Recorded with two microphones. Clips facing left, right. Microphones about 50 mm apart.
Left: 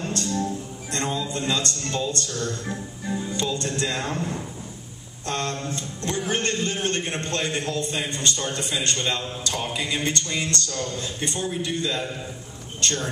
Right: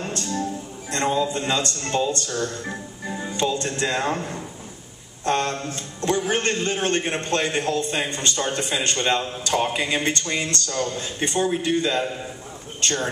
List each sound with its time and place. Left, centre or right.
0.0 s music: right
0.9 s speech: right